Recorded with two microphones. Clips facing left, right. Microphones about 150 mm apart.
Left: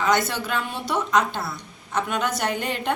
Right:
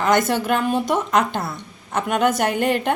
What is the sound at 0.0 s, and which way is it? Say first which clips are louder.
A woman's voice: right 4 dB; 50° right (ahead or behind).